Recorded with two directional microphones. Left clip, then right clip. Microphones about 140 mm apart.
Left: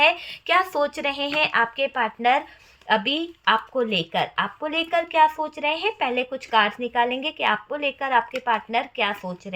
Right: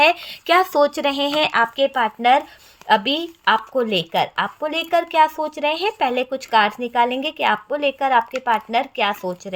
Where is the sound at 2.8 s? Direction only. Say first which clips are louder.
Right 4 dB; 85° right.